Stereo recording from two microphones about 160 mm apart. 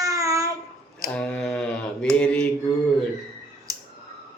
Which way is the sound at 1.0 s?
5° left (ahead or behind).